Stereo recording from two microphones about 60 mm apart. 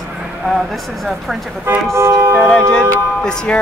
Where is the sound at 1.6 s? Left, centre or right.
Right.